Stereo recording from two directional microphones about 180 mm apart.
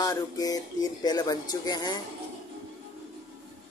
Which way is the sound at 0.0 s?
20° left (ahead or behind).